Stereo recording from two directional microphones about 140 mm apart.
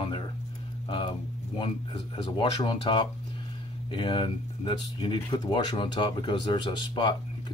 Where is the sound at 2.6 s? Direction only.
35° left (ahead or behind).